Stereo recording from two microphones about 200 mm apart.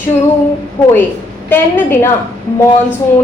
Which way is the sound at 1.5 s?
10° left (ahead or behind).